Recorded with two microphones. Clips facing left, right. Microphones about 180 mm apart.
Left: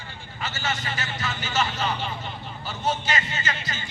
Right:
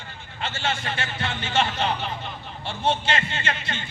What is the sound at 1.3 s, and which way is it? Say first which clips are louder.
Speech: right 1 dB; 55° right (ahead or behind).